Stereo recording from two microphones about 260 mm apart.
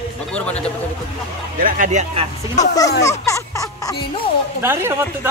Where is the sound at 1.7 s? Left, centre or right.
Right.